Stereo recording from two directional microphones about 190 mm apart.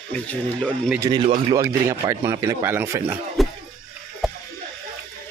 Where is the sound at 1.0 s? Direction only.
20° right (ahead or behind).